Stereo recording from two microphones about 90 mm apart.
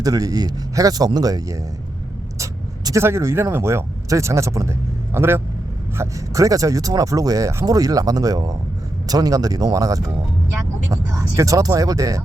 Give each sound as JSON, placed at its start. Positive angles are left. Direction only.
{"t": 0.0, "sound": "speech", "side_deg": -40}
{"t": 6.0, "sound": "speech", "side_deg": -35}